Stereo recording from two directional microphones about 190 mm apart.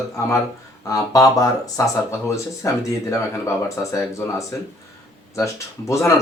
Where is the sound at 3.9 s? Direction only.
15° left (ahead or behind).